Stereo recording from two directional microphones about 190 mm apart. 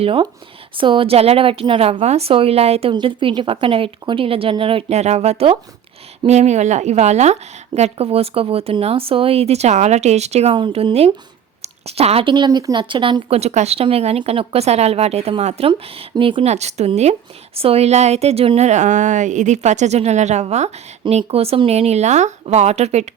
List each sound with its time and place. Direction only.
0.0 s a woman's voice: 25° right (ahead or behind)